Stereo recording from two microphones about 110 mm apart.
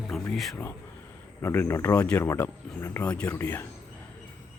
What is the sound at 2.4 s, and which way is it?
Speech, 25° left (ahead or behind).